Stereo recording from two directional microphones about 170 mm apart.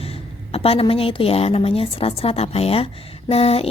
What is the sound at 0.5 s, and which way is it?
A woman's voice, 35° left (ahead or behind).